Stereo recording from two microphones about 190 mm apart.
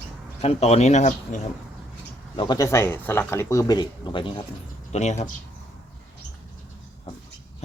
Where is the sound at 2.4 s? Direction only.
20° left (ahead or behind).